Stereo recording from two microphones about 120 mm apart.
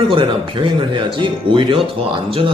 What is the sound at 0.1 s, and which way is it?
A man's voice, 45° right (ahead or behind).